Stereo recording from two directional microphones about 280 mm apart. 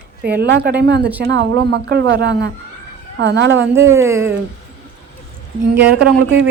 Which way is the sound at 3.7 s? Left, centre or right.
Centre.